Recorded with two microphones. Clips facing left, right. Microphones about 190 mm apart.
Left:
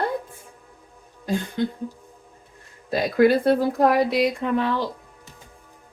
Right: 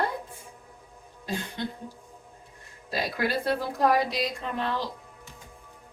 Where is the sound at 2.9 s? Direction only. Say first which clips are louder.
Left 11 dB; 55° left (ahead or behind).